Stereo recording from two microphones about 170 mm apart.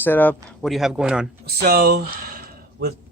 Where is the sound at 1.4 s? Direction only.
65° right (ahead or behind).